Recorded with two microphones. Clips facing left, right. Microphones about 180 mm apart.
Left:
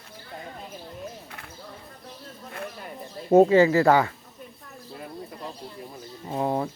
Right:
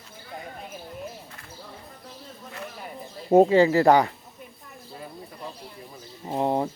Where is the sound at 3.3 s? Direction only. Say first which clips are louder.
Even; 15° right (ahead or behind).